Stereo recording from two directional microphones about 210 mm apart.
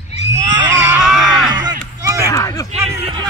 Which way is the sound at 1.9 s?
15° right (ahead or behind).